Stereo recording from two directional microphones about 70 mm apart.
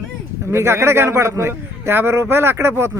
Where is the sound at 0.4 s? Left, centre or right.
Right.